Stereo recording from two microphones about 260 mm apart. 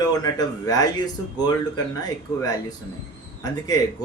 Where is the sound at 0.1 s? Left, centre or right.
Centre.